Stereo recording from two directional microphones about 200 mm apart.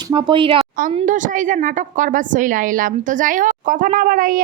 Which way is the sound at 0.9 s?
40° right (ahead or behind).